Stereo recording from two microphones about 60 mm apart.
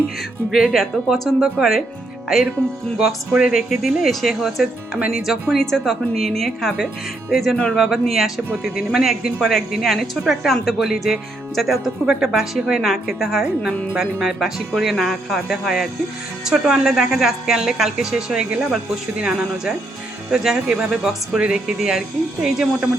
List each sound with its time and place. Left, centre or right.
0.5 s a woman's voice: centre
3.3 s a woman's voice: centre
3.7 s a woman's voice: centre
4.9 s speech: centre
5.2 s a woman's voice: centre
5.5 s a woman's voice: centre
7.5 s speech: centre
7.8 s a woman's voice: centre
9.4 s a woman's voice: centre